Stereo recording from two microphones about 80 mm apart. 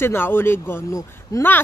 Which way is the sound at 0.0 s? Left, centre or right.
Left.